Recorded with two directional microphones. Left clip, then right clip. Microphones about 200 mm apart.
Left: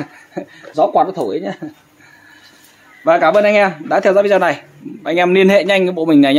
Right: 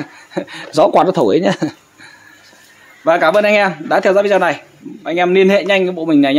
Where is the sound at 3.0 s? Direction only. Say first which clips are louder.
Left 1 dB; centre (ahead or behind).